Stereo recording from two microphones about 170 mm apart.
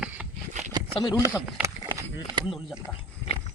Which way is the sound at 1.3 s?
15° right (ahead or behind).